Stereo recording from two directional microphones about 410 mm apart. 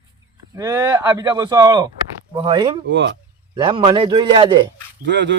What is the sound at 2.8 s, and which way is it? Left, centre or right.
Speech, right.